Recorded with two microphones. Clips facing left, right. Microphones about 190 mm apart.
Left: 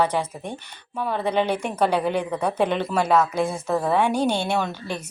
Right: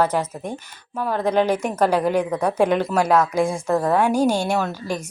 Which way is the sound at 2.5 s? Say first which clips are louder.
Right 4 dB; 5° right (ahead or behind).